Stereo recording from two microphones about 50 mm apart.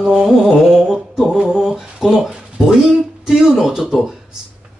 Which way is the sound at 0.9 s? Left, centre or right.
Centre.